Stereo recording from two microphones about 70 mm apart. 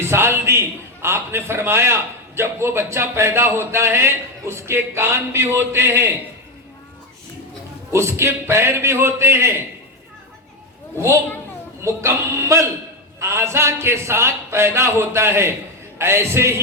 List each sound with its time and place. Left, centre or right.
0.0 s a man's voice: right
7.9 s a man's voice: right
11.8 s a man's voice: right